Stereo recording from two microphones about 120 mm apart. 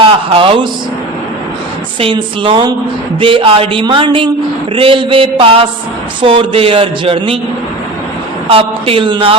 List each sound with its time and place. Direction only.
0.0 s speech: 45° right (ahead or behind)
2.0 s speech: 45° right (ahead or behind)
8.4 s speech: 50° right (ahead or behind)